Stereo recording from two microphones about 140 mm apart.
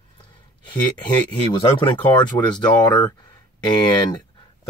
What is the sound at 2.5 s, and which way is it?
Speech, 10° left (ahead or behind).